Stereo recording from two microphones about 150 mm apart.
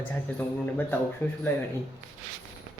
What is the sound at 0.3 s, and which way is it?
Speech, 10° left (ahead or behind).